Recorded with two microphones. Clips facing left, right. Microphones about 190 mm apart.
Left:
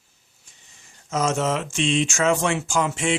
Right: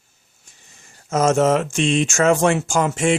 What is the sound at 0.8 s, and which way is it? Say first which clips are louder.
Speech: right 5 dB; 50° right (ahead or behind).